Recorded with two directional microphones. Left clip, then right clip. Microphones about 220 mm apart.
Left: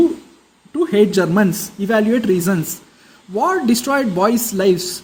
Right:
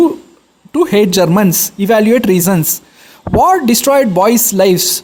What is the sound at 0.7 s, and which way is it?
Speech, 50° right (ahead or behind).